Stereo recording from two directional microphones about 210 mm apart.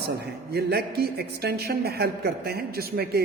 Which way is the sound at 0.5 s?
50° right (ahead or behind).